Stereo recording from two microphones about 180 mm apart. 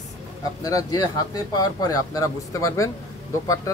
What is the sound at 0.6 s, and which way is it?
A woman's voice, 20° left (ahead or behind).